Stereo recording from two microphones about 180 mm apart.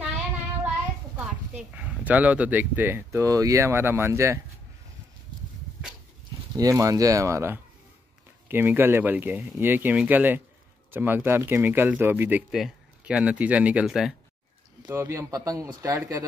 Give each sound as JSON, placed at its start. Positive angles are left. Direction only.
{"t": 1.1, "sound": "speech", "side_deg": -5}
{"t": 6.5, "sound": "speech", "side_deg": -20}
{"t": 14.8, "sound": "speech", "side_deg": -20}